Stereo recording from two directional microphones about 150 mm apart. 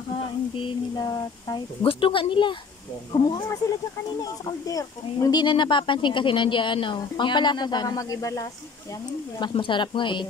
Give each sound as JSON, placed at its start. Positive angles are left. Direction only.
{"t": 0.6, "sound": "speech", "side_deg": 25}
{"t": 9.4, "sound": "speech", "side_deg": 35}